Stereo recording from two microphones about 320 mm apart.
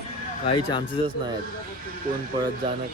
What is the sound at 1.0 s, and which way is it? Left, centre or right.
Speech, centre.